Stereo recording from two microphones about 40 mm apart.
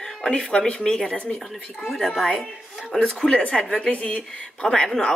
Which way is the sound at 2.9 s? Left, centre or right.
Left.